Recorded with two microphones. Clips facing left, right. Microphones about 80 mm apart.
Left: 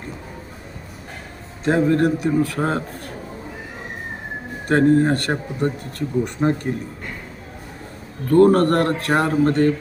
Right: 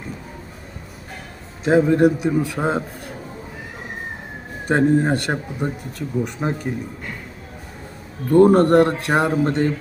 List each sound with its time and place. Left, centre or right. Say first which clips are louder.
1.6 s speech: right 2 dB; centre
4.7 s speech: left 1 dB; centre
8.3 s speech: right 1 dB; right